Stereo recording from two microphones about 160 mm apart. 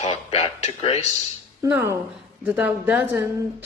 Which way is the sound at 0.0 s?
40° left (ahead or behind).